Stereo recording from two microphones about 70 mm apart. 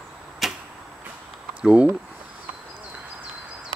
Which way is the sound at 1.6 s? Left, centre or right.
Centre.